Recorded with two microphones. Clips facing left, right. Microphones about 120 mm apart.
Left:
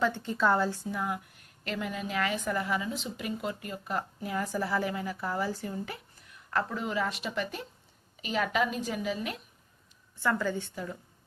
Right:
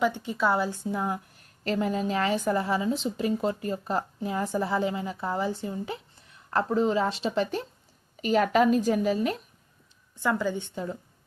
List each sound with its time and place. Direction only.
0.0 s a woman's voice: 15° right (ahead or behind)
0.9 s a woman's voice: 30° right (ahead or behind)
8.1 s a woman's voice: 45° right (ahead or behind)
10.2 s a woman's voice: 15° right (ahead or behind)